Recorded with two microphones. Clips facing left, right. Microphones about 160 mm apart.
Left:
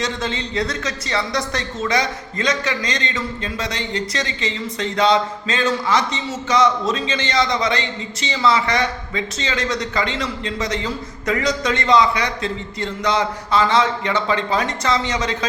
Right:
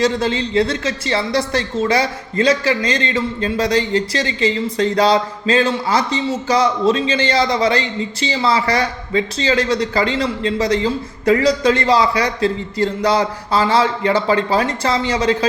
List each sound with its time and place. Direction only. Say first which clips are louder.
0.0 s speech: right 7 dB; 30° right (ahead or behind)